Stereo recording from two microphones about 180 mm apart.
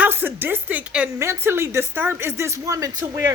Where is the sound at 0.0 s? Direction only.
10° right (ahead or behind).